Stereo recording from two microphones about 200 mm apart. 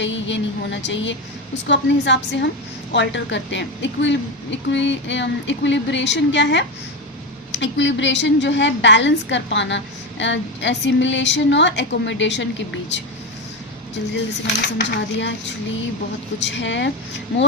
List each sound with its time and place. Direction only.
0.0 s a woman's voice: 65° left (ahead or behind)
14.1 s a woman's voice: 60° left (ahead or behind)